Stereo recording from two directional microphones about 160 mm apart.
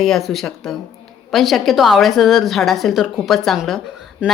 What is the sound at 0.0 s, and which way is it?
Speech, centre (ahead or behind).